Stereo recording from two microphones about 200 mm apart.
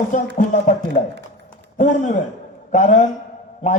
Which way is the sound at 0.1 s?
40° left (ahead or behind).